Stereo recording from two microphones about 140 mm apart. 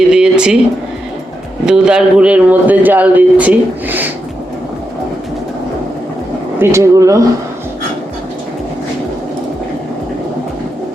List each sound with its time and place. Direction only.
0.1 s a sound: 5° right (ahead or behind)
1.6 s speech: 5° right (ahead or behind)
6.6 s speech: 20° right (ahead or behind)